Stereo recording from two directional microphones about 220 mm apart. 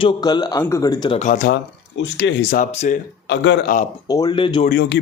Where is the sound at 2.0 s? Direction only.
55° left (ahead or behind).